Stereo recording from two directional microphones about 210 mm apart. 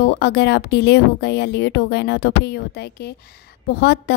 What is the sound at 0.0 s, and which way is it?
A woman's voice, 50° left (ahead or behind).